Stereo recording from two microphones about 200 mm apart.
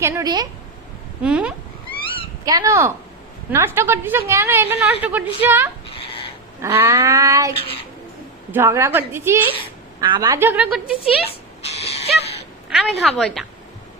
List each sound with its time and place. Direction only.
0.0 s speech: 20° right (ahead or behind)
1.2 s a woman's voice: 5° right (ahead or behind)
2.4 s a woman's voice: 20° right (ahead or behind)
5.9 s babbling: 30° left (ahead or behind)
6.6 s a woman's voice: 10° right (ahead or behind)
8.5 s a woman's voice: 15° right (ahead or behind)
11.3 s a sound: 30° left (ahead or behind)
12.7 s a woman's voice: centre (ahead or behind)